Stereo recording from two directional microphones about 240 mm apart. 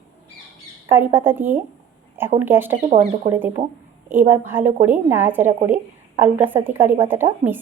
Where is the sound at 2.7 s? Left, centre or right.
Right.